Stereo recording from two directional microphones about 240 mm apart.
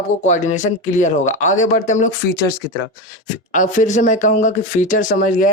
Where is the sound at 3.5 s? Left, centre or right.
Left.